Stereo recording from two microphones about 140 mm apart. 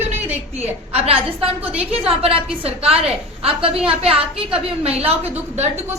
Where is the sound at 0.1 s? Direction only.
50° right (ahead or behind).